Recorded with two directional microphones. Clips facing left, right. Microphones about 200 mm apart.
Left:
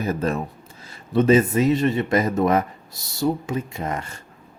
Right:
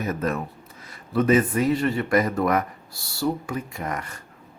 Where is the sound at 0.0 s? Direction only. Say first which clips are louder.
Left 2 dB; 30° left (ahead or behind).